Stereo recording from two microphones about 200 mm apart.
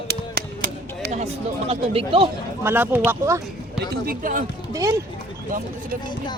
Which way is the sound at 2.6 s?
10° right (ahead or behind).